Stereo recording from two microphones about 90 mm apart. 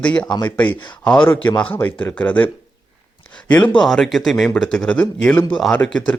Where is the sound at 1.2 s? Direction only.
25° left (ahead or behind).